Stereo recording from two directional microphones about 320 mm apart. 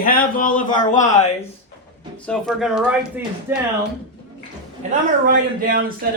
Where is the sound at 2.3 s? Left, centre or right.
Centre.